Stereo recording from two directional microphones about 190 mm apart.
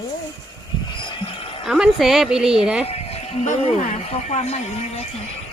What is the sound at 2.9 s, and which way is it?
Speech, 30° left (ahead or behind).